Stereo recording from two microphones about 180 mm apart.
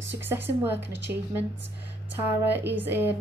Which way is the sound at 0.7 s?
75° right (ahead or behind).